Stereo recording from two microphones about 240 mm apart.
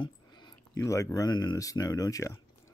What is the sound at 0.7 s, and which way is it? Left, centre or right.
Speech, centre.